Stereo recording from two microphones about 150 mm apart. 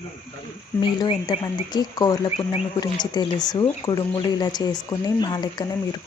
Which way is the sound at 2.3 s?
40° left (ahead or behind).